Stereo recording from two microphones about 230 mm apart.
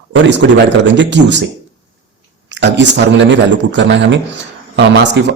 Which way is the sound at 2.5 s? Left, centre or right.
Right.